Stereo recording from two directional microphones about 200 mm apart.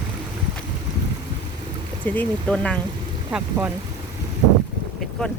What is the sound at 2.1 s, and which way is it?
Speech, 5° left (ahead or behind).